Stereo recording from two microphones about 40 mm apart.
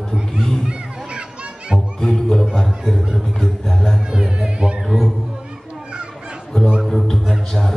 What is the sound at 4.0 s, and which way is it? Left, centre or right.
Music, centre.